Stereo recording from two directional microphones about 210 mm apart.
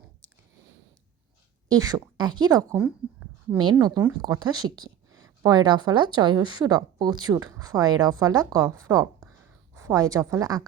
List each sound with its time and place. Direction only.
1.7 s speech: 20° right (ahead or behind)
2.7 s speech: 5° right (ahead or behind)
3.6 s a woman's voice: 20° right (ahead or behind)